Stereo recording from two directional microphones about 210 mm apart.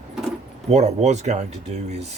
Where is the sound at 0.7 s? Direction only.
30° right (ahead or behind).